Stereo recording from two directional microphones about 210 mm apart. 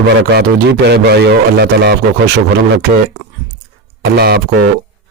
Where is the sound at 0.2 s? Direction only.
55° right (ahead or behind).